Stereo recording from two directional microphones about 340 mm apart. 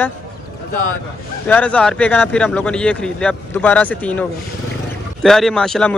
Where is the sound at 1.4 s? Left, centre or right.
Centre.